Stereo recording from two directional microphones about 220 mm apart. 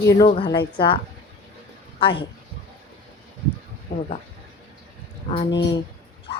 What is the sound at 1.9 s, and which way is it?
Speech, 25° left (ahead or behind).